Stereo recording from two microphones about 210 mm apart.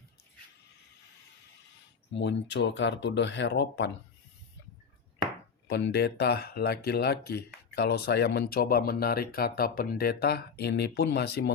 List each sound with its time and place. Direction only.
2.1 s speech: 55° left (ahead or behind)
5.6 s speech: 50° left (ahead or behind)